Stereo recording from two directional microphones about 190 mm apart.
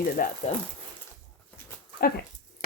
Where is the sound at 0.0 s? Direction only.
45° left (ahead or behind).